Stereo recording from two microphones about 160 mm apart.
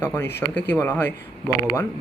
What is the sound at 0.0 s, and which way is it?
Speech, 10° left (ahead or behind).